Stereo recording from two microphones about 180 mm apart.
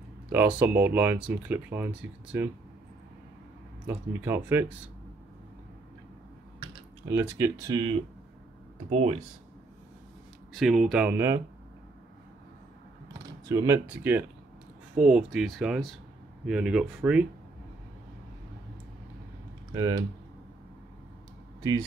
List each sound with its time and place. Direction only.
0.3 s speech: 10° right (ahead or behind)
3.8 s speech: 10° right (ahead or behind)
6.6 s speech: 20° right (ahead or behind)
8.9 s speech: 35° right (ahead or behind)
10.5 s speech: centre (ahead or behind)
13.5 s speech: 20° right (ahead or behind)
19.7 s speech: 20° right (ahead or behind)